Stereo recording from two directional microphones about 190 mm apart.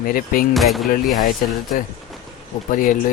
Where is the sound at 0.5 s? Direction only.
Centre (ahead or behind).